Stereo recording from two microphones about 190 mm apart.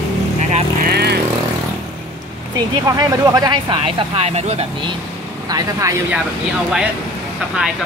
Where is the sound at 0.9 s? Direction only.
60° right (ahead or behind).